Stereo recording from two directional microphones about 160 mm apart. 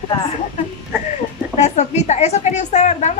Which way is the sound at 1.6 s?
45° left (ahead or behind).